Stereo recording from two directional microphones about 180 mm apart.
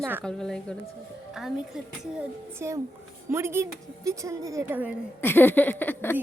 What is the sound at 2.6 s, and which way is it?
A woman's voice, 15° right (ahead or behind).